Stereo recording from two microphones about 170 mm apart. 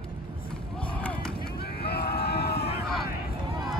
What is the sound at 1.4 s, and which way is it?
Vehicle, 65° left (ahead or behind).